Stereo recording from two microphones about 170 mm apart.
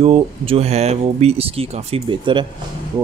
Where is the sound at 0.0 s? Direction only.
35° right (ahead or behind).